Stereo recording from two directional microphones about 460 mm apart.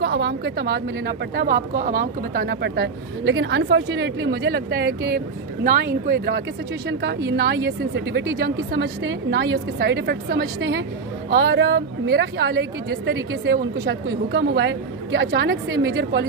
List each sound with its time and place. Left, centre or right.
0.0 s speech: right